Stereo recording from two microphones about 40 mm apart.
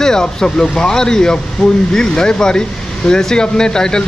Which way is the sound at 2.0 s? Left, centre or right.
Centre.